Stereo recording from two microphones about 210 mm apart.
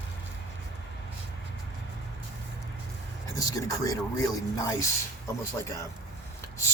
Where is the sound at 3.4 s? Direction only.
15° left (ahead or behind).